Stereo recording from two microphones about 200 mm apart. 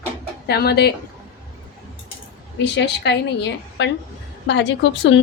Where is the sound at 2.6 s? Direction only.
60° left (ahead or behind).